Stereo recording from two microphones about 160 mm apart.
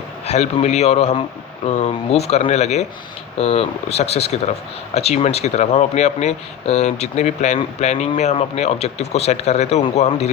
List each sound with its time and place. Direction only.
0.3 s speech: 45° left (ahead or behind)